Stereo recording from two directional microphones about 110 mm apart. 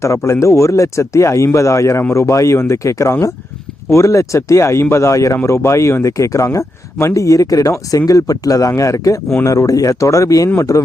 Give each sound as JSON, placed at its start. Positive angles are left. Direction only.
{"t": 0.0, "sound": "speech", "side_deg": 25}